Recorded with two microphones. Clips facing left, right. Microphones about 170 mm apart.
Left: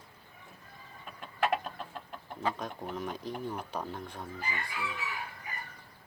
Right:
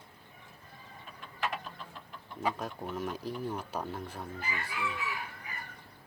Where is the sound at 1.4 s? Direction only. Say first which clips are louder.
Left 6 dB; 60° left (ahead or behind).